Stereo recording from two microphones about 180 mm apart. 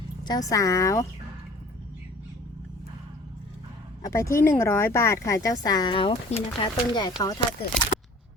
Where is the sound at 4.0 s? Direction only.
15° left (ahead or behind).